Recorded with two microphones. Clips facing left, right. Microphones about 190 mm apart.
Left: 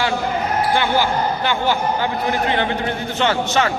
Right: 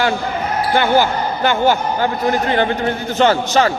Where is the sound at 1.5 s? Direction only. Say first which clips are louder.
Right 7 dB; 45° right (ahead or behind).